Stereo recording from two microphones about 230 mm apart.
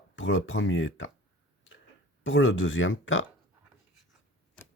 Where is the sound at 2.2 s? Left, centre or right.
Left.